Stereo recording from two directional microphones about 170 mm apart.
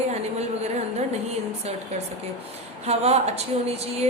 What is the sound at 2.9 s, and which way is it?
A woman's voice, 40° right (ahead or behind).